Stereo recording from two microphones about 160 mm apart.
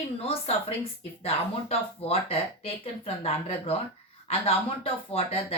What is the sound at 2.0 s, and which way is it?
Speech, 35° left (ahead or behind).